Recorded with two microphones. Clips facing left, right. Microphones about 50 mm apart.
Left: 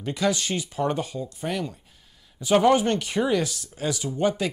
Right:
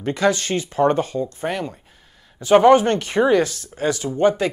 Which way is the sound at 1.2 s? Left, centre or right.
Right.